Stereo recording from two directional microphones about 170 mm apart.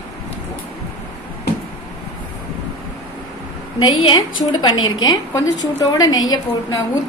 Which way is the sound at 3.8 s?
25° left (ahead or behind).